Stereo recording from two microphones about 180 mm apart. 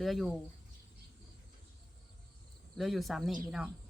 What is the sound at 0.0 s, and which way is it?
Speech, centre (ahead or behind).